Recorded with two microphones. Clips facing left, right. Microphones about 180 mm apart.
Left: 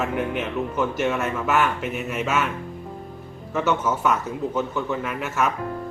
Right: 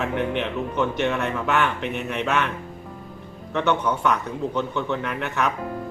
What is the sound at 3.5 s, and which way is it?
Speech, 5° left (ahead or behind).